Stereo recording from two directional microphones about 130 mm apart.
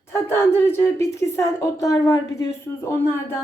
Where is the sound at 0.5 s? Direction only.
20° left (ahead or behind).